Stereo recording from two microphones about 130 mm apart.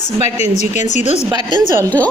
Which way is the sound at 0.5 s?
65° left (ahead or behind).